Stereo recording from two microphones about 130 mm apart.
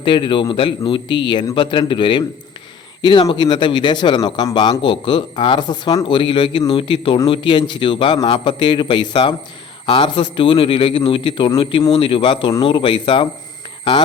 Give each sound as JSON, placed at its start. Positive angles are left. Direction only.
{"t": 0.0, "sound": "speech", "side_deg": 40}